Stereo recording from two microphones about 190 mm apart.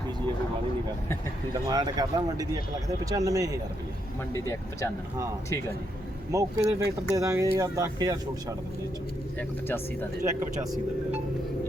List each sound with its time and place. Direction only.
1.6 s speech: 20° right (ahead or behind)
4.4 s speech: 15° left (ahead or behind)
6.3 s speech: 15° right (ahead or behind)
9.6 s speech: 10° left (ahead or behind)